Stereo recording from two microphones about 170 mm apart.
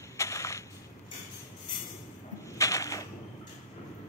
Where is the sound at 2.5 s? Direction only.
20° left (ahead or behind).